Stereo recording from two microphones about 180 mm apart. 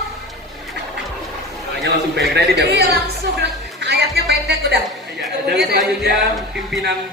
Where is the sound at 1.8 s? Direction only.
65° right (ahead or behind).